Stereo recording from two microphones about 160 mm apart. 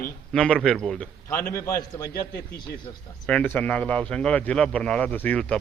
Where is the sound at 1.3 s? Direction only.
15° left (ahead or behind).